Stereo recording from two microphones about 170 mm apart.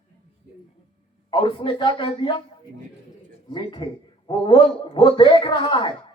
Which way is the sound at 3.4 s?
25° left (ahead or behind).